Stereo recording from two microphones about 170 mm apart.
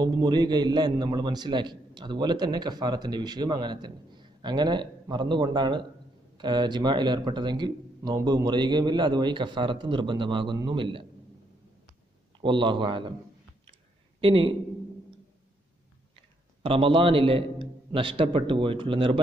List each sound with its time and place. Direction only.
0.0 s a man's voice: 25° right (ahead or behind)
12.4 s a man's voice: 30° right (ahead or behind)
14.2 s a man's voice: 30° right (ahead or behind)
16.6 s a man's voice: 30° right (ahead or behind)